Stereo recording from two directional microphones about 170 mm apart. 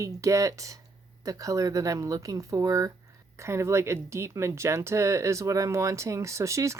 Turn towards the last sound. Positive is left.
turn(degrees=-15)  # may be behind; listen again after turning